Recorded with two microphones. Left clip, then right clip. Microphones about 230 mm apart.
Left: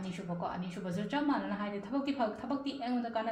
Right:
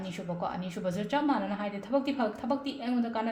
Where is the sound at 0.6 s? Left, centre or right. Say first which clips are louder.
Right 6 dB; right.